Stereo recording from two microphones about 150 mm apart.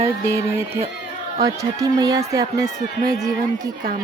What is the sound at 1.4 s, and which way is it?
Speech, 25° right (ahead or behind).